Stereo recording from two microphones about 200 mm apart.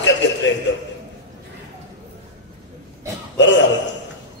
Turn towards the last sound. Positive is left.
turn(degrees=65)  # may be behind; listen again after turning